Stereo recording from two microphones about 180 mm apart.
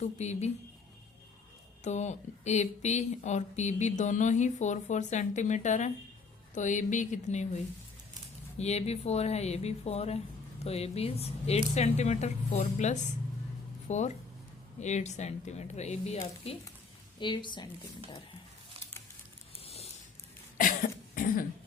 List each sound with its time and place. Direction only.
0.0 s speech: 40° left (ahead or behind)
1.8 s speech: 40° left (ahead or behind)
8.5 s a woman's voice: 35° left (ahead or behind)
19.5 s a sound: 35° left (ahead or behind)
20.6 s cough: 50° left (ahead or behind)